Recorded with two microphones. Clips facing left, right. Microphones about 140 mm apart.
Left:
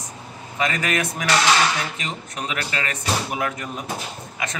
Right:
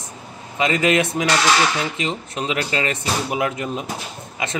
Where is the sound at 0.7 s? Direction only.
25° right (ahead or behind).